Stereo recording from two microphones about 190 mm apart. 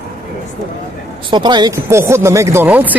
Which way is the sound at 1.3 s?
25° right (ahead or behind).